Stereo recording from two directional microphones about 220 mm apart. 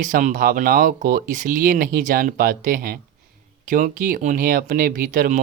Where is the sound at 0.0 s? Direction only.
35° right (ahead or behind).